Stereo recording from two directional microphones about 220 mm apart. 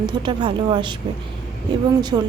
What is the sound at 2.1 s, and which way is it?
Speech, 15° right (ahead or behind).